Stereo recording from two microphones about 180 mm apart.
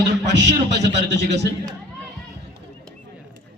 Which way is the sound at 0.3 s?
70° right (ahead or behind).